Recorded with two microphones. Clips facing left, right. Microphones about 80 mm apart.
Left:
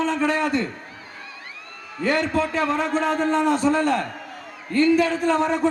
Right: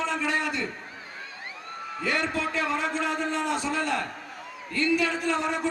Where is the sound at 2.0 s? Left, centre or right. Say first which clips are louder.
Left 7 dB; left.